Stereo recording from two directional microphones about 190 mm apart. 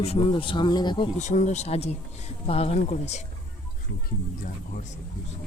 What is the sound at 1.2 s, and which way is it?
Speech, 40° left (ahead or behind).